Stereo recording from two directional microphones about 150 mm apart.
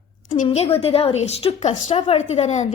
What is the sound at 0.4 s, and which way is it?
A woman's voice, 45° left (ahead or behind).